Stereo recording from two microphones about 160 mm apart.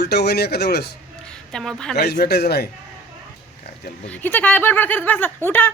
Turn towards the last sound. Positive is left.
turn(degrees=15)  # may be behind; listen again after turning